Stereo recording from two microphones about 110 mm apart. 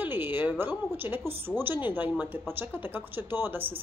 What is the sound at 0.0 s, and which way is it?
A woman's voice, 20° right (ahead or behind).